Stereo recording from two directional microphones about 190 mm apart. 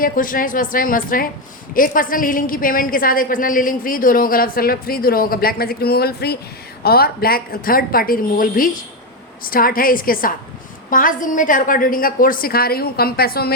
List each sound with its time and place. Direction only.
0.0 s a woman's voice: 45° left (ahead or behind)